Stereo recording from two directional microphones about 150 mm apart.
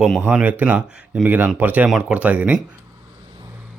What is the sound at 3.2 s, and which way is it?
Vehicle, 30° right (ahead or behind).